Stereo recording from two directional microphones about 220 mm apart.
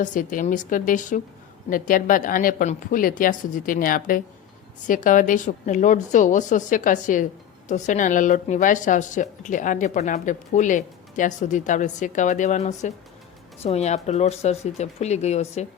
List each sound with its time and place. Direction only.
0.0 s a woman's voice: 35° left (ahead or behind)